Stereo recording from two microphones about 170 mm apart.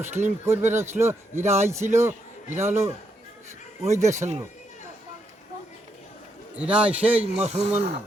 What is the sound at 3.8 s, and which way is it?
Speech, 40° right (ahead or behind).